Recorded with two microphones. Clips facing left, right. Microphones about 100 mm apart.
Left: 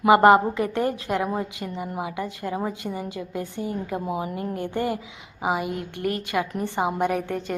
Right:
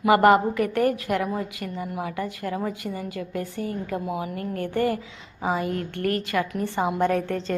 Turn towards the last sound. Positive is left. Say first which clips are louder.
# right 2 dB
turn(degrees=15)  # may be behind; listen again after turning